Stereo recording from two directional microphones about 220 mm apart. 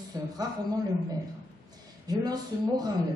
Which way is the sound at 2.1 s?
15° right (ahead or behind).